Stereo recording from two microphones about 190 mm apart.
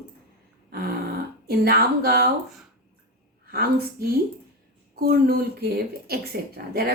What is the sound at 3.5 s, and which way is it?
Speech, 55° right (ahead or behind).